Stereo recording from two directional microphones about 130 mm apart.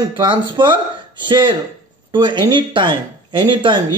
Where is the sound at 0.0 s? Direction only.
35° right (ahead or behind).